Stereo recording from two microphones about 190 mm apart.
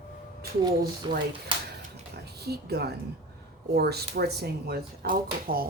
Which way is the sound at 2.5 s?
60° right (ahead or behind).